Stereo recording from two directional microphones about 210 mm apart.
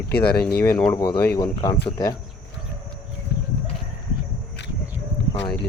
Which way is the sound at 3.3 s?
55° left (ahead or behind).